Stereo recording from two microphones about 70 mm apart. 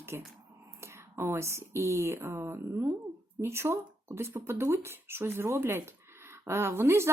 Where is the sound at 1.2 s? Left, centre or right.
Right.